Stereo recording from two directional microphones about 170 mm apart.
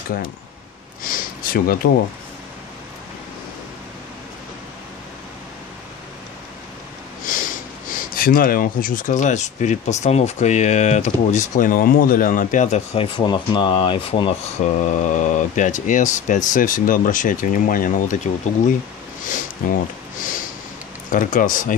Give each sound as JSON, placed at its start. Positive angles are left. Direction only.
{"t": 1.0, "sound": "a sound", "side_deg": 55}
{"t": 7.2, "sound": "sniff", "side_deg": 55}
{"t": 8.1, "sound": "speech", "side_deg": 60}
{"t": 14.6, "sound": "speech", "side_deg": 45}
{"t": 19.6, "sound": "speech", "side_deg": 55}
{"t": 20.2, "sound": "a sound", "side_deg": 50}
{"t": 21.1, "sound": "speech", "side_deg": 50}